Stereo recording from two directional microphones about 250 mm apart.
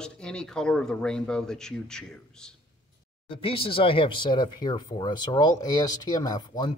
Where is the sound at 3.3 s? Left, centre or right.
Left.